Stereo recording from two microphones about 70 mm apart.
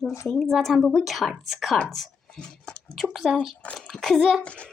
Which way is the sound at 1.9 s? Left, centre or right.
Centre.